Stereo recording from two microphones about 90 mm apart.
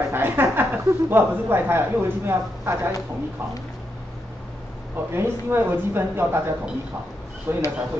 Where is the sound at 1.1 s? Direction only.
25° right (ahead or behind).